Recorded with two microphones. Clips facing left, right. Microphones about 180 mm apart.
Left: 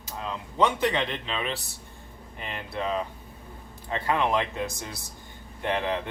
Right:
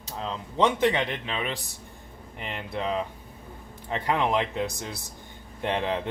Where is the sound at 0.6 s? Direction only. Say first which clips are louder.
Right 2 dB; 15° right (ahead or behind).